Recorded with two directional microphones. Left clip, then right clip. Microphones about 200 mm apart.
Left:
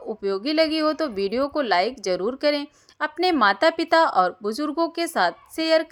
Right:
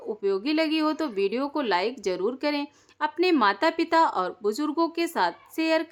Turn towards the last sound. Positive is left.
turn(degrees=15)  # may be behind; listen again after turning